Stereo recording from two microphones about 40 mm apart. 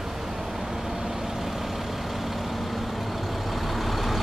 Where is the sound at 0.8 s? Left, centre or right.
Centre.